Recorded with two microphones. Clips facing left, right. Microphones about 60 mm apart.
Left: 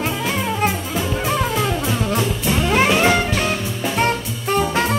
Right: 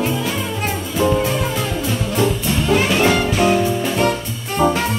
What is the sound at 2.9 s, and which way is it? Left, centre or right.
Music, centre.